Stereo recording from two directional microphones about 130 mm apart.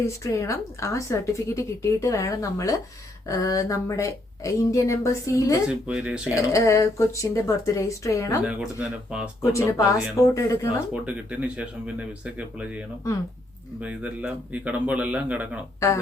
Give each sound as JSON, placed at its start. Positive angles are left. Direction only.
{"t": 0.0, "sound": "a woman's voice", "side_deg": 20}
{"t": 5.6, "sound": "speech", "side_deg": -10}
{"t": 6.5, "sound": "a woman's voice", "side_deg": 25}
{"t": 8.4, "sound": "speech", "side_deg": -5}
{"t": 9.4, "sound": "a woman's voice", "side_deg": 25}
{"t": 10.9, "sound": "speech", "side_deg": -10}
{"t": 13.8, "sound": "speech", "side_deg": -10}